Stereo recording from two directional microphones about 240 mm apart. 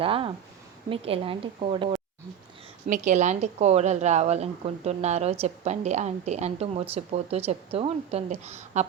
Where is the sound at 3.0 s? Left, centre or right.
Right.